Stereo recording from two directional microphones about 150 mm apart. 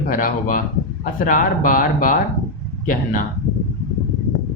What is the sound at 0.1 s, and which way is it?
Speech, 65° left (ahead or behind).